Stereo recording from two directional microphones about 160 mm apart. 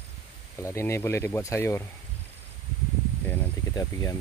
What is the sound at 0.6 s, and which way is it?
Speech, 15° left (ahead or behind).